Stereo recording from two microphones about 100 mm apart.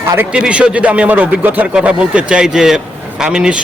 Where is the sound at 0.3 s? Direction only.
10° right (ahead or behind).